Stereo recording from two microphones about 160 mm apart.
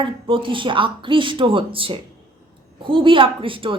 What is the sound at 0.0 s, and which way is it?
Speech, 30° right (ahead or behind).